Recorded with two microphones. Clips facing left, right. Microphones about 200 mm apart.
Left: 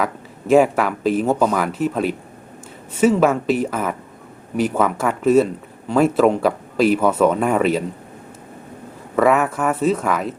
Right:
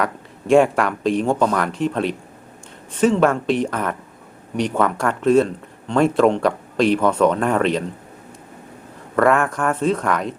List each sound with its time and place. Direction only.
0.0 s speech: 5° left (ahead or behind)
9.1 s speech: 5° left (ahead or behind)